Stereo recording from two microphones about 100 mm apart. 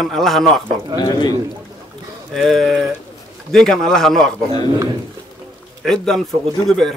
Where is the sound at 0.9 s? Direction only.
45° left (ahead or behind).